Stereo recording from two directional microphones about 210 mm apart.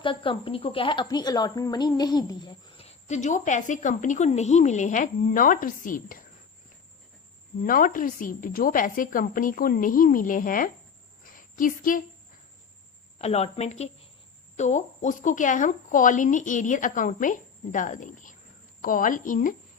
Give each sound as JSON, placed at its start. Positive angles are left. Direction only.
{"t": 0.0, "sound": "speech", "side_deg": 25}
{"t": 7.6, "sound": "speech", "side_deg": 40}
{"t": 11.2, "sound": "a sound", "side_deg": 40}
{"t": 13.1, "sound": "speech", "side_deg": 30}